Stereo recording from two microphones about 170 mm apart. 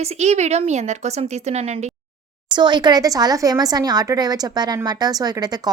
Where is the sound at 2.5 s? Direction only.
25° right (ahead or behind).